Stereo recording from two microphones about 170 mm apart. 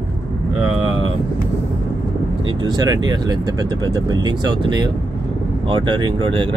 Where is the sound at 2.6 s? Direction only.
25° right (ahead or behind).